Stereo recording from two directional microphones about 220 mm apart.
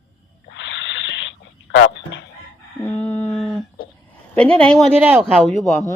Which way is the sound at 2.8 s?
10° left (ahead or behind).